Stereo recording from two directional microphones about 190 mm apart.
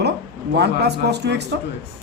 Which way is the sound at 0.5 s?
60° right (ahead or behind).